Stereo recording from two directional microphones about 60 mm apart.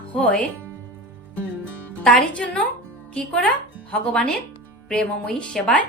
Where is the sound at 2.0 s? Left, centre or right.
Centre.